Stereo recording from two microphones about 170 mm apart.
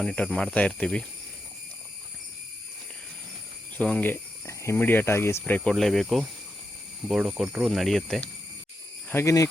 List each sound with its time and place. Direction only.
0.0 s speech: 5° left (ahead or behind)
3.8 s speech: 5° left (ahead or behind)
9.0 s speech: 15° left (ahead or behind)